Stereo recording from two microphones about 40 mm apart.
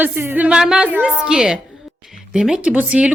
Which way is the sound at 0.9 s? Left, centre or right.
Right.